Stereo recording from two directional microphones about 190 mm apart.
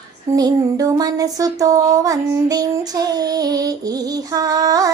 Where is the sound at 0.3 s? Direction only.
20° right (ahead or behind).